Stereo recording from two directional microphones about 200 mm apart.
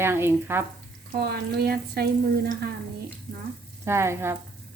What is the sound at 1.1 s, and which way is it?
Frying, 50° right (ahead or behind).